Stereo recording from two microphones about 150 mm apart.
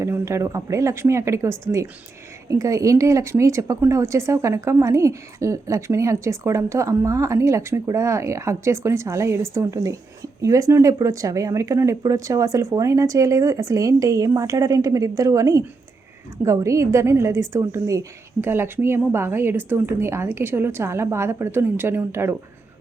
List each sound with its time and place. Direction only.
0.0 s a woman's voice: 20° right (ahead or behind)